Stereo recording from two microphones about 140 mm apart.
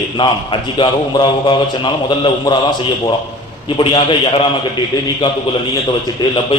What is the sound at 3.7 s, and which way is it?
Speech, 35° left (ahead or behind).